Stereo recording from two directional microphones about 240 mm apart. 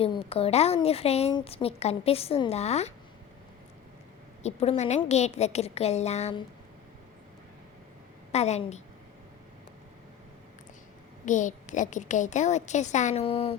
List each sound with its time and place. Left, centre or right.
0.0 s a woman's voice: left
4.4 s a woman's voice: left
8.3 s a woman's voice: left
11.3 s a woman's voice: left